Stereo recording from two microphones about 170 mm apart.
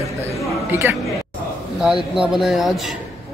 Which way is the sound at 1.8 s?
5° right (ahead or behind).